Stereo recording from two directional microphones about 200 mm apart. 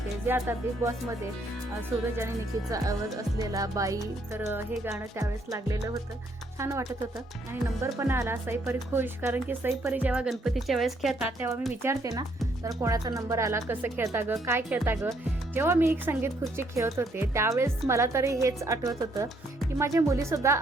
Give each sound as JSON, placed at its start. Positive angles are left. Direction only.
{"t": 0.3, "sound": "speech", "side_deg": -10}
{"t": 2.1, "sound": "speech", "side_deg": -15}
{"t": 7.9, "sound": "speech", "side_deg": -15}